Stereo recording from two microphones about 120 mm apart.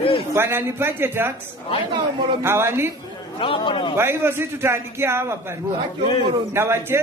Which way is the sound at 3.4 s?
45° left (ahead or behind).